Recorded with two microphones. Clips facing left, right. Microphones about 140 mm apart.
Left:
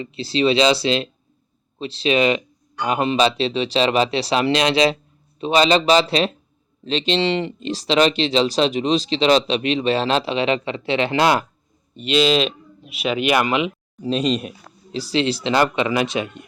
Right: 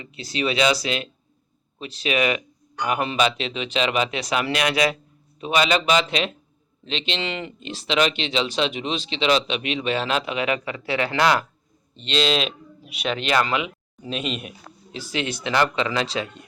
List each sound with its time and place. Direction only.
0.0 s speech: 30° left (ahead or behind)
11.9 s speech: 5° left (ahead or behind)
14.0 s speech: 35° left (ahead or behind); by 16.4 s 20° left (ahead or behind)